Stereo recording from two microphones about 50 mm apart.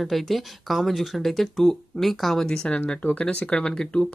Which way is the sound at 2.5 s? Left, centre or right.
Centre.